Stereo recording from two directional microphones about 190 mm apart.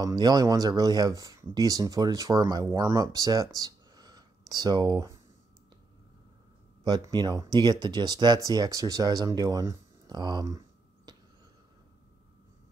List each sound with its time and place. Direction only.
0.0 s speech: 20° right (ahead or behind)
6.8 s speech: 20° right (ahead or behind)